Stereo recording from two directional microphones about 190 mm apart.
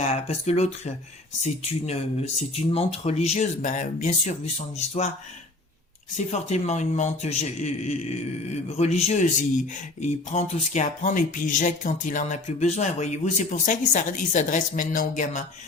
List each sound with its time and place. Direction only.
0.0 s a man's voice: 35° left (ahead or behind)
6.1 s a man's voice: 35° left (ahead or behind)